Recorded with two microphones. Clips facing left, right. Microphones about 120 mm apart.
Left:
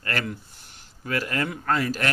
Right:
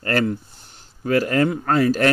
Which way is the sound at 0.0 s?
35° right (ahead or behind).